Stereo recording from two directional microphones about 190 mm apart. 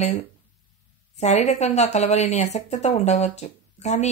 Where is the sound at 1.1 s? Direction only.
35° left (ahead or behind).